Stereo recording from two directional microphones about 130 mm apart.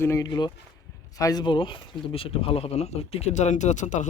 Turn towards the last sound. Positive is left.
turn(degrees=70)  # may be behind; listen again after turning